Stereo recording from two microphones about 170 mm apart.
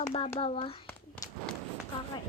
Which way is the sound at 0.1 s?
35° left (ahead or behind).